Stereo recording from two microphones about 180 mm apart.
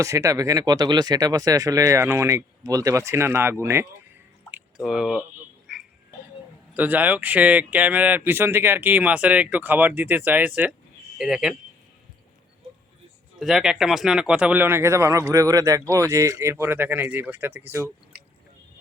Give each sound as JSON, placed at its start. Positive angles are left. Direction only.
{"t": 0.0, "sound": "speech", "side_deg": -15}
{"t": 4.8, "sound": "speech", "side_deg": -5}
{"t": 5.7, "sound": "frog", "side_deg": 0}
{"t": 6.7, "sound": "speech", "side_deg": -10}
{"t": 13.4, "sound": "speech", "side_deg": 0}